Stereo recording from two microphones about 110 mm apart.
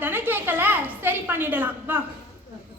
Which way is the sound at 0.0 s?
15° right (ahead or behind).